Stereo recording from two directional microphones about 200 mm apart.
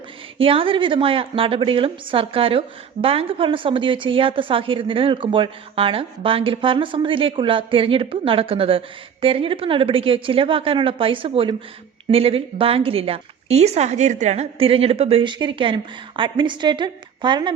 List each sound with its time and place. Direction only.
0.3 s a woman's voice: 25° right (ahead or behind)